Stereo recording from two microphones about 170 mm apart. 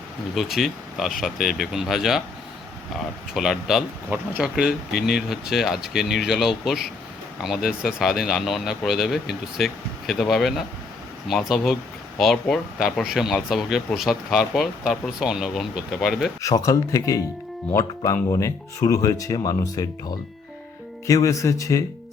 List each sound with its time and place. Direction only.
0.3 s speech: centre (ahead or behind)
3.3 s speech: centre (ahead or behind)
16.4 s speech: 20° left (ahead or behind)
21.1 s speech: 20° left (ahead or behind)